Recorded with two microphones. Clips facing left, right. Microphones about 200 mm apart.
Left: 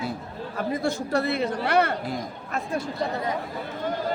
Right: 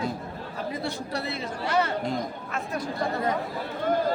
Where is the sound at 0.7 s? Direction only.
50° left (ahead or behind).